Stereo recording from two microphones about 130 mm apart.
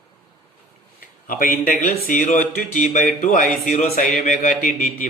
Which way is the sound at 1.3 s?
90° left.